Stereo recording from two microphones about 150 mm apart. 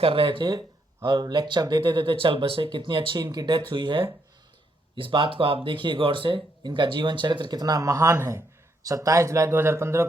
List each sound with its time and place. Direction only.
0.0 s speech: 35° right (ahead or behind); by 10.1 s 20° right (ahead or behind)